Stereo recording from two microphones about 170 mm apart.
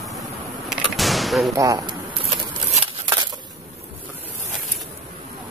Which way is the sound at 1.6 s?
20° right (ahead or behind).